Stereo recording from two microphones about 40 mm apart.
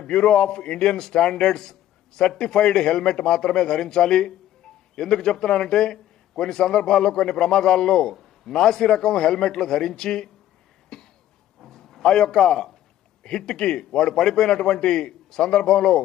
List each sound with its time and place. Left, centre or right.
0.0 s a man's voice: centre
8.1 s a man's voice: centre
10.9 s cough: centre
11.6 s a sound: centre
12.4 s a man's voice: centre